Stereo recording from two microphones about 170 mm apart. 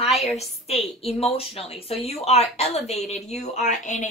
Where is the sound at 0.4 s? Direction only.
35° left (ahead or behind).